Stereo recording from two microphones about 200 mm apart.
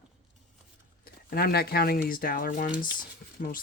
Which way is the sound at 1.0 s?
50° left (ahead or behind).